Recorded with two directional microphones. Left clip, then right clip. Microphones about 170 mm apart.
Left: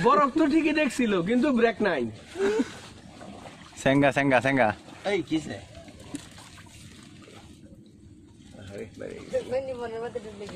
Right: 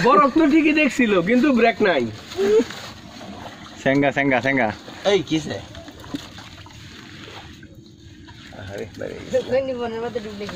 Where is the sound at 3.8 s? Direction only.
45° left (ahead or behind).